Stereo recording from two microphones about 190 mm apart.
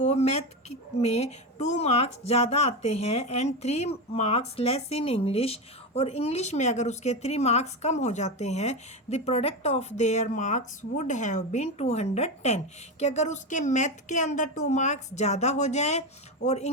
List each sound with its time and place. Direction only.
0.0 s speech: 35° left (ahead or behind)